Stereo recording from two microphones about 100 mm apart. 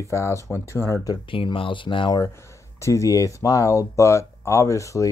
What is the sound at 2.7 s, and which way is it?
Speech, 30° left (ahead or behind).